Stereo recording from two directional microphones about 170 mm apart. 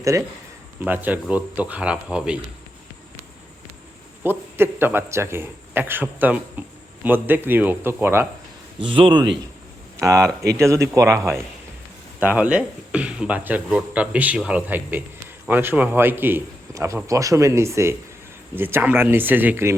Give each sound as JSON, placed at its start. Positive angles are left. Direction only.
{"t": 0.0, "sound": "a man's voice", "side_deg": -20}
{"t": 4.2, "sound": "a man's voice", "side_deg": -10}
{"t": 8.8, "sound": "a man's voice", "side_deg": -30}
{"t": 10.0, "sound": "a man's voice", "side_deg": -20}